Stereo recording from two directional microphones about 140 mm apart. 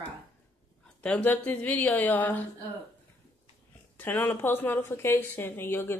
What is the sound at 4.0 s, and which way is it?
Speech, 15° left (ahead or behind).